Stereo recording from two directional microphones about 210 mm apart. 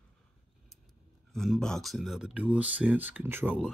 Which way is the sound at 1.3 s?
Centre (ahead or behind).